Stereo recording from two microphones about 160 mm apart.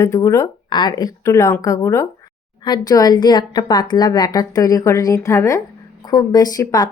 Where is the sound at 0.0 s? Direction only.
20° left (ahead or behind).